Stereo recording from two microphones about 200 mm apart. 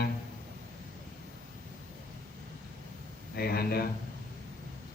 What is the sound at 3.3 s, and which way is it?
Speech, 50° left (ahead or behind).